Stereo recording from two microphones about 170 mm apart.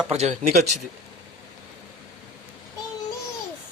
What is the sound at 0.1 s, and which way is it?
Speech, 40° right (ahead or behind).